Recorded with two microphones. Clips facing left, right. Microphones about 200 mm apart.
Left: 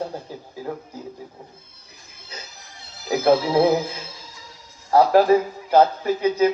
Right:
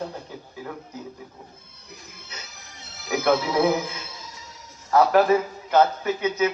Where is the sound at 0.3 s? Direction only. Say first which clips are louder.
Left 3 dB; 35° left (ahead or behind).